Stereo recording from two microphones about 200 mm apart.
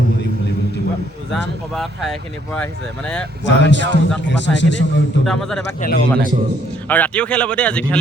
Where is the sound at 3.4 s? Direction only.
65° left (ahead or behind).